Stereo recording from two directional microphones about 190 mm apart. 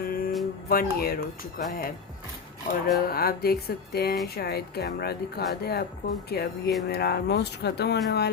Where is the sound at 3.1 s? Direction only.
55° left (ahead or behind).